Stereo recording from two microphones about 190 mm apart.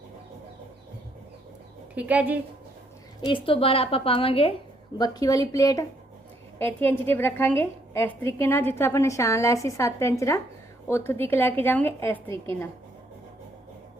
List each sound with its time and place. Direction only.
2.0 s a woman's voice: 5° right (ahead or behind)
3.2 s a woman's voice: 25° left (ahead or behind)